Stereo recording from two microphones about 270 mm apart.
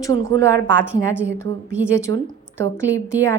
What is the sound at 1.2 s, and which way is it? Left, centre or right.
Speech, centre.